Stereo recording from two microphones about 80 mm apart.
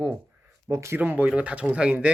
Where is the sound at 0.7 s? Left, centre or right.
Right.